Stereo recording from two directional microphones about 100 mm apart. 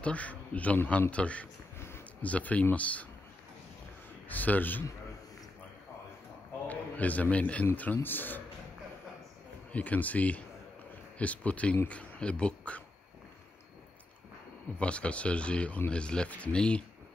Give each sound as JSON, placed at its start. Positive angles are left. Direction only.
{"t": 0.0, "sound": "speech", "side_deg": 15}
{"t": 4.3, "sound": "speech", "side_deg": 15}
{"t": 6.7, "sound": "a man's voice", "side_deg": 15}
{"t": 9.7, "sound": "speech", "side_deg": 15}
{"t": 14.8, "sound": "speech", "side_deg": 10}